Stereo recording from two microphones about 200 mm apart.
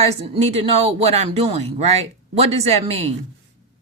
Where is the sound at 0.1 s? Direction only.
30° right (ahead or behind).